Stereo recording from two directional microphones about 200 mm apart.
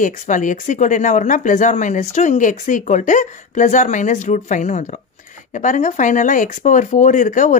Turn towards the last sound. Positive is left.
turn(degrees=40)  # may be behind; listen again after turning